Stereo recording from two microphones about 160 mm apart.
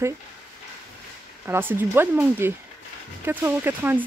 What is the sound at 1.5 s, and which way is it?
Speech, 15° right (ahead or behind).